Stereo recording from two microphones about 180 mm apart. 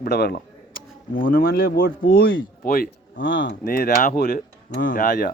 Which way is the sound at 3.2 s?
90° left.